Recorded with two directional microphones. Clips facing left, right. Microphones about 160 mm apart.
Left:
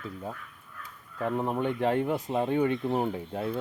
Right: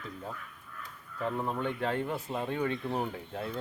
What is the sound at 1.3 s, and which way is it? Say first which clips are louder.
Speech: left 6 dB; 20° left (ahead or behind).